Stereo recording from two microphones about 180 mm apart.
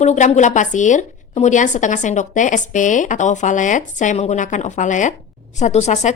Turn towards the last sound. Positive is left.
turn(degrees=40)  # may be behind; listen again after turning